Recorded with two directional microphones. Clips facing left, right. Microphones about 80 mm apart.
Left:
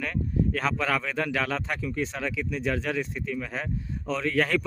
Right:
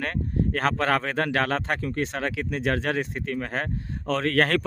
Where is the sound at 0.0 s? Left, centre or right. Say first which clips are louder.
Right 1 dB; right.